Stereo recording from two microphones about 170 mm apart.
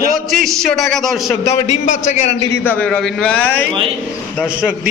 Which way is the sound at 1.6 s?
45° left (ahead or behind).